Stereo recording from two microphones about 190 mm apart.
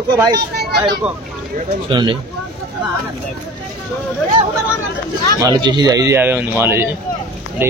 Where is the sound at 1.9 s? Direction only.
25° right (ahead or behind).